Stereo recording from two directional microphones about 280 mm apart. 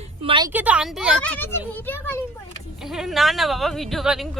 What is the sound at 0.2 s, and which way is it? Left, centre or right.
Speech, centre.